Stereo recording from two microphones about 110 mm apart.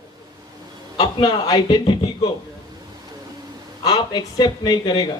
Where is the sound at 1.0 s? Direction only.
40° left (ahead or behind).